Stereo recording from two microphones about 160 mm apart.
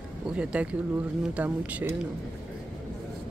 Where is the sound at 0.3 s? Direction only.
5° right (ahead or behind).